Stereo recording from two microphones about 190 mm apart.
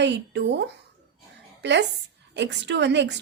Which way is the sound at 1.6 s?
65° right (ahead or behind).